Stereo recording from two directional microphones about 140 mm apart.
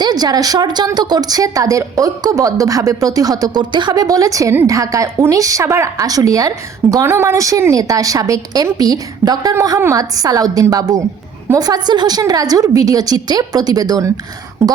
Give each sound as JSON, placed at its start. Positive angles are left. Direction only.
{"t": 0.0, "sound": "a woman's voice", "side_deg": -30}